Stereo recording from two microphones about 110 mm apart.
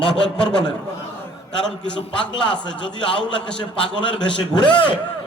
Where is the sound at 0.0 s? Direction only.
10° left (ahead or behind).